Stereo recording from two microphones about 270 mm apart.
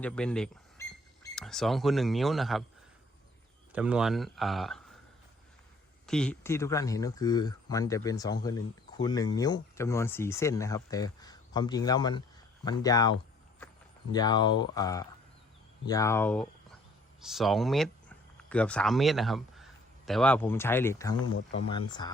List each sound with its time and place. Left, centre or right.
0.0 s speech: centre
3.7 s speech: centre
6.1 s speech: centre
21.2 s speech: left
21.7 s speech: centre